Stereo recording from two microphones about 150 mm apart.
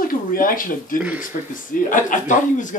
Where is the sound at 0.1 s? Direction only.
70° left (ahead or behind).